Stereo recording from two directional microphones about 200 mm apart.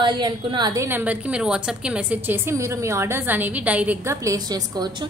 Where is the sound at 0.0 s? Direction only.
20° right (ahead or behind).